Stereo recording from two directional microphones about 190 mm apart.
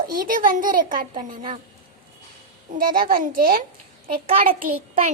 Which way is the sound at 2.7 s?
50° right (ahead or behind).